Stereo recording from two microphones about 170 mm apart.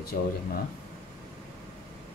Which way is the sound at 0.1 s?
55° left (ahead or behind).